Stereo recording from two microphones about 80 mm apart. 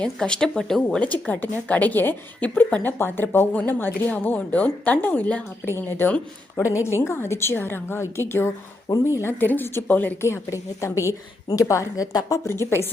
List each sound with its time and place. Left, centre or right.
0.0 s a woman's voice: centre
1.3 s a woman's voice: centre
5.6 s a woman's voice: left
6.6 s a woman's voice: left
10.2 s a woman's voice: left
12.5 s a woman's voice: left